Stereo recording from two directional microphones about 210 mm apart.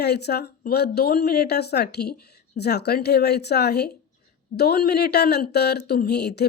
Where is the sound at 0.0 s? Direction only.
50° left (ahead or behind).